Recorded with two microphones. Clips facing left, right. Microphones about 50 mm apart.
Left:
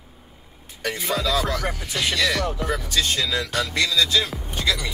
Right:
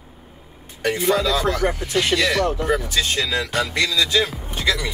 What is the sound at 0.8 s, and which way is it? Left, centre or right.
Speech, centre.